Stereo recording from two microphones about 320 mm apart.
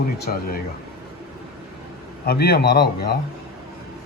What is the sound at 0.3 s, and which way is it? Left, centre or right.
Speech, left.